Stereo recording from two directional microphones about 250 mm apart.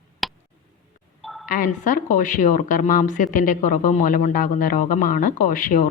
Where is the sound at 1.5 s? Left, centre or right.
Left.